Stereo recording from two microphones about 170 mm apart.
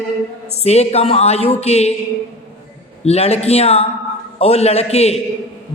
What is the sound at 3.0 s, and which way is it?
Speech, 40° left (ahead or behind).